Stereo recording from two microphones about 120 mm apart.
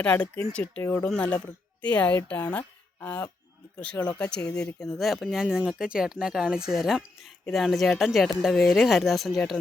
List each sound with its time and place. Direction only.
0.0 s speech: 10° left (ahead or behind)
1.0 s speech: 10° left (ahead or behind)